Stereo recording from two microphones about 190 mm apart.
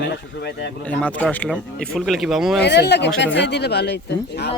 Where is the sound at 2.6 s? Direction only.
60° left (ahead or behind).